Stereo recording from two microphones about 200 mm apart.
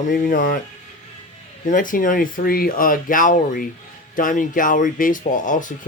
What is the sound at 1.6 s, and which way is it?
Speech, 40° left (ahead or behind).